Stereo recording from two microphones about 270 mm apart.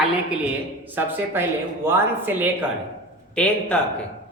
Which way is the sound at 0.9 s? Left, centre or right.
Centre.